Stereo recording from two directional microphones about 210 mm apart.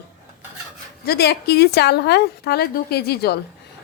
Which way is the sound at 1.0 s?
50° left (ahead or behind).